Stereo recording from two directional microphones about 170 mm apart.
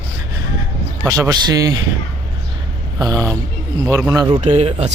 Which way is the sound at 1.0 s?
20° right (ahead or behind).